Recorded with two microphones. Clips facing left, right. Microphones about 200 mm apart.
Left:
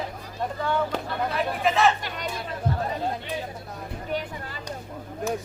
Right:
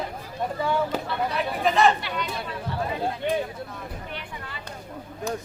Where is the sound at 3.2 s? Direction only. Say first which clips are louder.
Right 7 dB; 55° right (ahead or behind).